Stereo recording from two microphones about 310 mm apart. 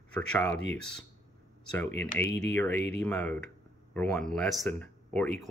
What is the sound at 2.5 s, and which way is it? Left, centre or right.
Speech, centre.